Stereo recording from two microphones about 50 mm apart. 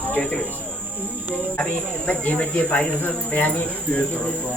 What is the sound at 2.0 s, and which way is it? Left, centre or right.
Speech, left.